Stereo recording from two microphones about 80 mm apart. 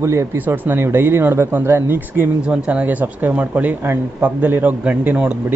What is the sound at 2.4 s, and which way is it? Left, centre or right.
Speech, centre.